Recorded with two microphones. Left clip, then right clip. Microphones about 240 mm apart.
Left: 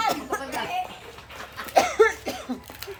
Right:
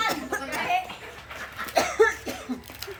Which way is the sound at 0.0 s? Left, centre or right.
Centre.